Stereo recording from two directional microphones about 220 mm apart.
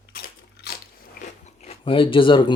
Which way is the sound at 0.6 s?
45° left (ahead or behind).